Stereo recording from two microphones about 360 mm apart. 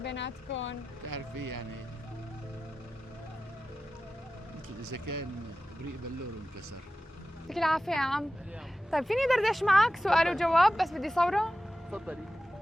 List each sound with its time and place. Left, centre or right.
0.0 s speech: left
1.0 s speech: right
4.8 s speech: right
7.5 s speech: centre